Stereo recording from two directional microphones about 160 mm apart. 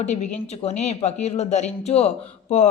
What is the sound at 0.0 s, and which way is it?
A woman's voice, 45° left (ahead or behind).